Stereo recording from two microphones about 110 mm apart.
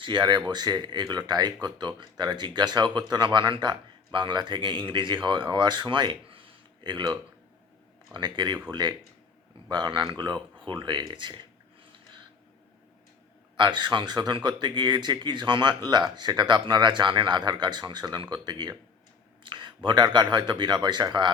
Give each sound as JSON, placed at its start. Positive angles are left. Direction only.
{"t": 0.0, "sound": "speech", "side_deg": -45}
{"t": 13.6, "sound": "speech", "side_deg": -45}